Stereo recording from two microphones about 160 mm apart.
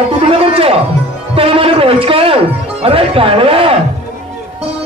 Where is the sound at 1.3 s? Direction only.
35° right (ahead or behind).